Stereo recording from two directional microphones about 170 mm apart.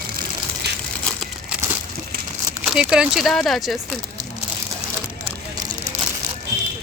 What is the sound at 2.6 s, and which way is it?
A woman's voice, 5° right (ahead or behind).